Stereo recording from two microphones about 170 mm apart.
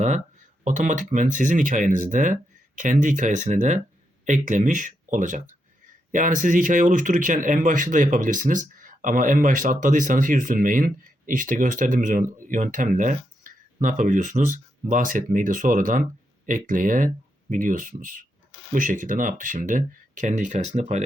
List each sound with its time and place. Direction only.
0.6 s speech: 45° right (ahead or behind)